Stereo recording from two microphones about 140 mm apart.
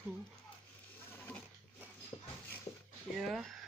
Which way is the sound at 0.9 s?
15° left (ahead or behind).